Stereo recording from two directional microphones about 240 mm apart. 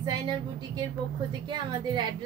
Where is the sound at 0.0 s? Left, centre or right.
Centre.